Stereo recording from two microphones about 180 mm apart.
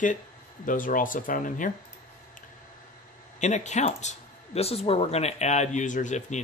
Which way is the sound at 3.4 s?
40° left (ahead or behind).